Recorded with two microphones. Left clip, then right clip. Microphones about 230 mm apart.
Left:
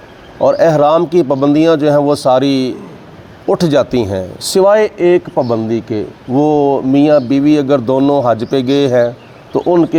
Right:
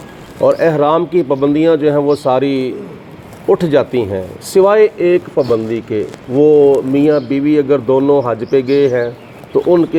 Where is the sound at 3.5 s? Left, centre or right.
Left.